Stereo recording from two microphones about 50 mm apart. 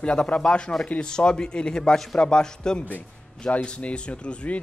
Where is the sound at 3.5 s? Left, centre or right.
Left.